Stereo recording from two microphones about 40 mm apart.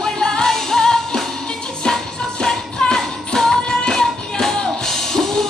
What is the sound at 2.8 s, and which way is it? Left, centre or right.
Music, centre.